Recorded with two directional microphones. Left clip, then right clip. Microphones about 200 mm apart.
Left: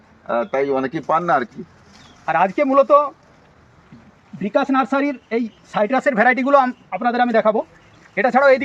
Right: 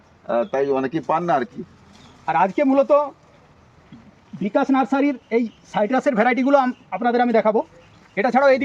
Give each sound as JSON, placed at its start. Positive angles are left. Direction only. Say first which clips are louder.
{"t": 0.3, "sound": "speech", "louder": "left 1 dB", "side_deg": -15}
{"t": 2.2, "sound": "speech", "louder": "left 1 dB", "side_deg": 15}
{"t": 4.4, "sound": "speech", "louder": "left 1 dB", "side_deg": 0}
{"t": 5.8, "sound": "speech", "louder": "left 3 dB", "side_deg": 15}
{"t": 7.0, "sound": "speech", "louder": "left 1 dB", "side_deg": -5}
{"t": 8.1, "sound": "speech", "louder": "left 2 dB", "side_deg": 10}